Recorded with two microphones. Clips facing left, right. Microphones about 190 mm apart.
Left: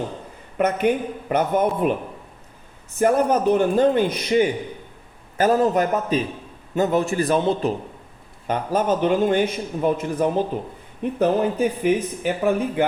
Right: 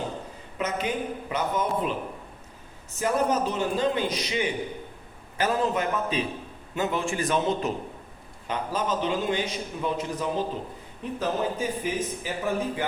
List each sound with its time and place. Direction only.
0.5 s speech: 55° left (ahead or behind)
3.0 s a man's voice: 55° left (ahead or behind); by 7.7 s 35° left (ahead or behind)
8.4 s a man's voice: 55° left (ahead or behind)